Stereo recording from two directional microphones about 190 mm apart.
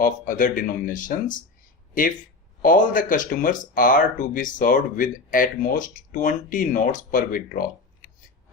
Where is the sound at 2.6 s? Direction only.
45° left (ahead or behind).